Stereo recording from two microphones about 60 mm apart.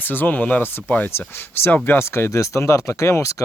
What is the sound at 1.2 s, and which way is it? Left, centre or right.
Speech, left.